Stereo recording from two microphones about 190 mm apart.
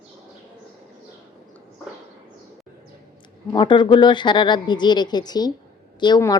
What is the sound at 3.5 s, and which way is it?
Speech, 25° left (ahead or behind).